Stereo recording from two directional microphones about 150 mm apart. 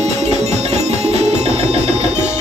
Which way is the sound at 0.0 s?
50° right (ahead or behind).